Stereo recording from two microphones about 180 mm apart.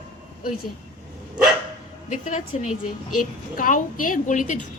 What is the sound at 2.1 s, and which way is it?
A woman's voice, 45° left (ahead or behind).